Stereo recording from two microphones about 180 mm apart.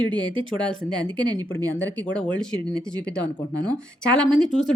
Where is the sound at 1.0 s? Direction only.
25° right (ahead or behind).